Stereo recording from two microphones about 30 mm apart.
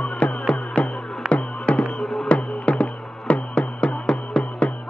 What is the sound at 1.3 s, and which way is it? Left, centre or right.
Music, left.